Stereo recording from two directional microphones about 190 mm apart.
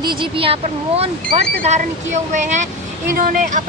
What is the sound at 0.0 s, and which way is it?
Speech, 25° right (ahead or behind).